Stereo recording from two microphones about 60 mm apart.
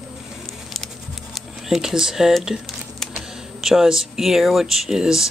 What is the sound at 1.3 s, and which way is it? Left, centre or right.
Speech, centre.